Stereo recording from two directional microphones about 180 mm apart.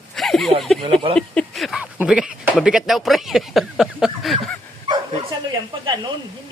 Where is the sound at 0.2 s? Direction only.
Centre (ahead or behind).